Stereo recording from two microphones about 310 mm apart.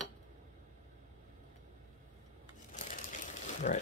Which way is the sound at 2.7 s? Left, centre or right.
Left.